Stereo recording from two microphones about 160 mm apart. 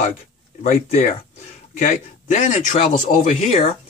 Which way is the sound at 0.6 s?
45° left (ahead or behind).